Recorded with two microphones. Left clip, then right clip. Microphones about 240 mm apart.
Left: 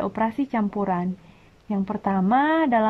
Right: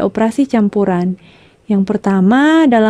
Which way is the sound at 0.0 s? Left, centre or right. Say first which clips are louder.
Right 10 dB; right.